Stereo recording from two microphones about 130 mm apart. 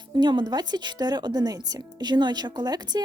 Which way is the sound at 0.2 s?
35° right (ahead or behind).